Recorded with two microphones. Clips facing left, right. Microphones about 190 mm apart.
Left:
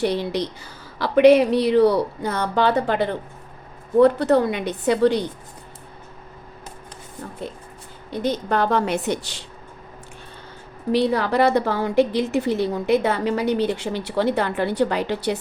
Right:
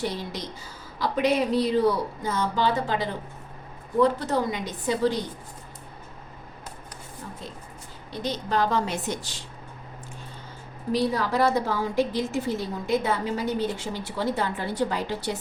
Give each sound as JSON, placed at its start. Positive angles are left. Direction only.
{"t": 0.0, "sound": "a woman's voice", "side_deg": 65}
{"t": 7.4, "sound": "a woman's voice", "side_deg": 60}
{"t": 10.9, "sound": "a woman's voice", "side_deg": 65}